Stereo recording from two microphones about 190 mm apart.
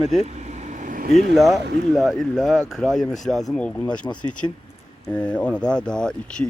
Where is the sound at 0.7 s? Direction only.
45° right (ahead or behind).